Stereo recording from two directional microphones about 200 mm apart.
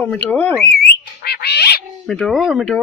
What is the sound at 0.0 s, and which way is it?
Speech, 5° left (ahead or behind).